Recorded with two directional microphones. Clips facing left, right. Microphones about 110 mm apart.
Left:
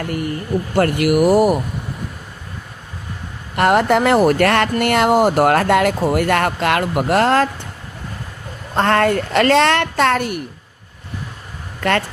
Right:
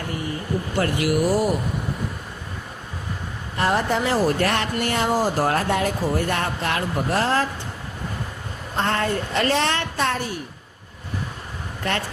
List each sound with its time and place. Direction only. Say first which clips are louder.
0.8 s speech: left 7 dB; 60° left (ahead or behind)
3.5 s speech: left 7 dB; 70° left (ahead or behind)
4.8 s speech: left 7 dB; 70° left (ahead or behind)
8.7 s speech: left 8 dB; 80° left
11.8 s speech: left 8 dB; 80° left